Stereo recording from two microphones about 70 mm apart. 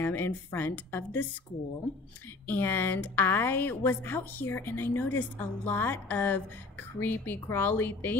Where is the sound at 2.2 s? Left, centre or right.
Left.